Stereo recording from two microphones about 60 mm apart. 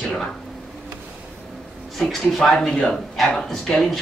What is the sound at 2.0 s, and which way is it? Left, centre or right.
Speech, centre.